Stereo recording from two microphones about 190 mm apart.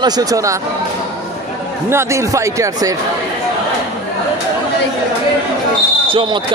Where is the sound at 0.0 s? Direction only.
20° right (ahead or behind).